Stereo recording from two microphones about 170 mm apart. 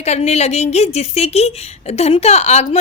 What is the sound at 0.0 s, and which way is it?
A woman's voice, 40° left (ahead or behind).